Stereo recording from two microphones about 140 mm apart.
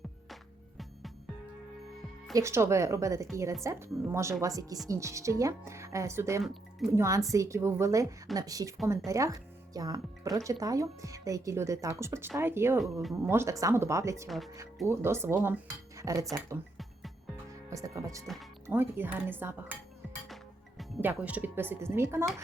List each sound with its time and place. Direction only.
2.3 s speech: 20° right (ahead or behind)
6.4 s speech: centre (ahead or behind)
6.9 s speech: 20° right (ahead or behind)
12.8 s speech: centre (ahead or behind)
13.2 s speech: 20° right (ahead or behind)
14.3 s speech: centre (ahead or behind)
14.8 s speech: 20° right (ahead or behind)
17.7 s speech: 25° right (ahead or behind)
20.2 s music: centre (ahead or behind)
21.0 s speech: 10° right (ahead or behind)